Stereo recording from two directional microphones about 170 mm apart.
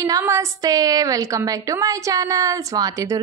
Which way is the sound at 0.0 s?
20° right (ahead or behind).